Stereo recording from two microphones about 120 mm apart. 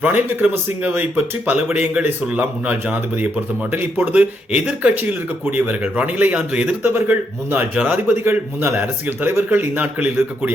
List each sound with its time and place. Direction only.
0.0 s a man's voice: 15° right (ahead or behind)